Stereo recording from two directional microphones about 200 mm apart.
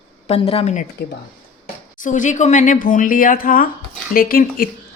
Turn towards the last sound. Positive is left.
turn(degrees=45)  # may be behind; listen again after turning